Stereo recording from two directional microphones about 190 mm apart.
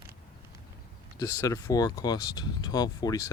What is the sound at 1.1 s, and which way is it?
Speech, 15° left (ahead or behind).